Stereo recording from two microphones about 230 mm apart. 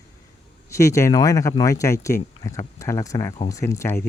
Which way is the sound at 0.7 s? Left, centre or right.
Centre.